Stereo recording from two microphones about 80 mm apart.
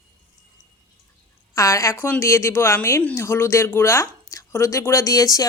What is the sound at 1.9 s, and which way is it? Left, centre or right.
Speech, left.